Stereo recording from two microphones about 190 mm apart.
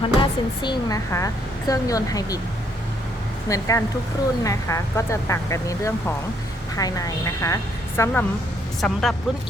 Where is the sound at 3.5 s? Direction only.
15° left (ahead or behind).